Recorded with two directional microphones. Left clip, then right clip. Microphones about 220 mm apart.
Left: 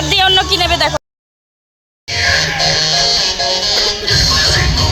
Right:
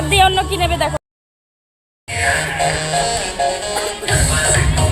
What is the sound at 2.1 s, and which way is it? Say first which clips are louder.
Music: left 4 dB; 40° left (ahead or behind).